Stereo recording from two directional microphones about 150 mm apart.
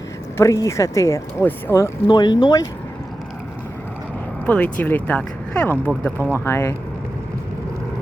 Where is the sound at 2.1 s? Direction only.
30° left (ahead or behind).